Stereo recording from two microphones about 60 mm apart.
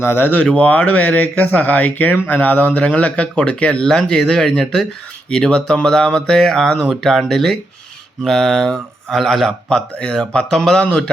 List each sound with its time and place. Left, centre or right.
0.0 s speech: left
0.5 s a man's voice: left